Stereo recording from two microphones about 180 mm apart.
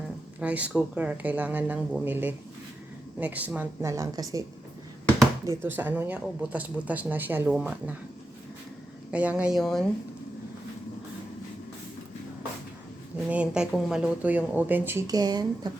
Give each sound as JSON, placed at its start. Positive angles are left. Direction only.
{"t": 0.3, "sound": "speech", "side_deg": -10}
{"t": 5.5, "sound": "speech", "side_deg": -10}
{"t": 9.1, "sound": "speech", "side_deg": -5}
{"t": 13.3, "sound": "speech", "side_deg": -5}